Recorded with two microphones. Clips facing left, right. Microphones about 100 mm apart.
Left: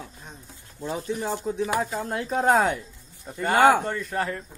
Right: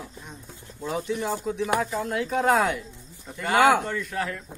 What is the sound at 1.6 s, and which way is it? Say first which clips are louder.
A man's voice: right 1 dB; 30° left (ahead or behind).